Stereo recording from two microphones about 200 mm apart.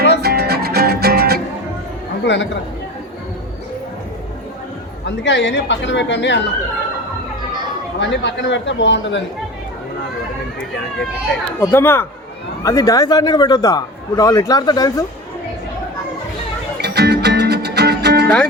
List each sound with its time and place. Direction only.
0.0 s music: 50° right (ahead or behind)
2.2 s speech: 60° left (ahead or behind)
5.0 s speech: 60° left (ahead or behind)
7.9 s speech: 60° left (ahead or behind)
11.6 s a man's voice: 10° left (ahead or behind)
16.8 s music: 55° right (ahead or behind)